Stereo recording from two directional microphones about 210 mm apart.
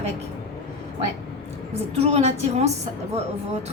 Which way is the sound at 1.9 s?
30° right (ahead or behind).